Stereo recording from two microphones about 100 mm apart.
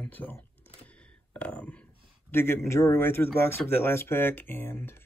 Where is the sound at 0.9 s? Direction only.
10° left (ahead or behind).